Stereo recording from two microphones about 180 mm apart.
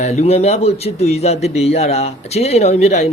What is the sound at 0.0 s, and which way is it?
Speech, 40° left (ahead or behind).